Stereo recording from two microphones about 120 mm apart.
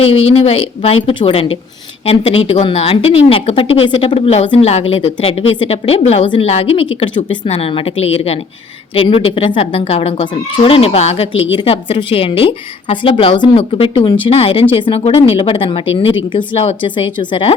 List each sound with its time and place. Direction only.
0.0 s a woman's voice: 55° left (ahead or behind)